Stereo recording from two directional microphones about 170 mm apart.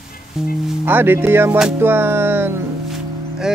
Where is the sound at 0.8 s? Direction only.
10° right (ahead or behind).